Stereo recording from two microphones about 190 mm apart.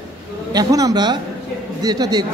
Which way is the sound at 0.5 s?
20° right (ahead or behind).